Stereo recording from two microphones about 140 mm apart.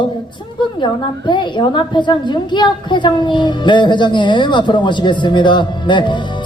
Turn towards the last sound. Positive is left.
turn(degrees=35)  # may be behind; listen again after turning